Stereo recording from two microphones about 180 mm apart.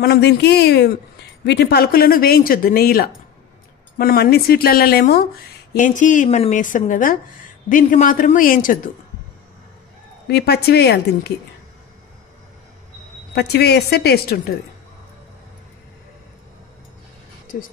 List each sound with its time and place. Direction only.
0.0 s speech: 65° left (ahead or behind); by 8.9 s 50° left (ahead or behind)
10.2 s speech: 65° left (ahead or behind)
13.3 s speech: 65° left (ahead or behind)